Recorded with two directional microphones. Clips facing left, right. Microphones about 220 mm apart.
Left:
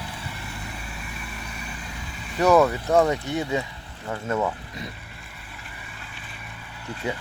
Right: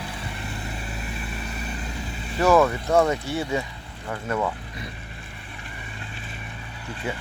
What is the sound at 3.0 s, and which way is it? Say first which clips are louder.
Speech: even; 15° left (ahead or behind).